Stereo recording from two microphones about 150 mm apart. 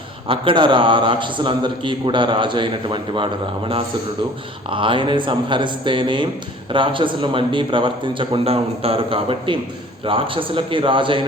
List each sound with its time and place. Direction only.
0.3 s a man's voice: 35° right (ahead or behind)
4.7 s a man's voice: 35° right (ahead or behind)